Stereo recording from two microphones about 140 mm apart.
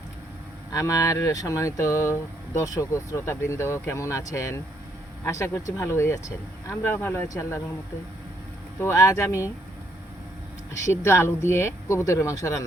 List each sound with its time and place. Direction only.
0.7 s speech: 25° left (ahead or behind)
8.8 s speech: 20° left (ahead or behind)
11.0 s speech: 20° left (ahead or behind)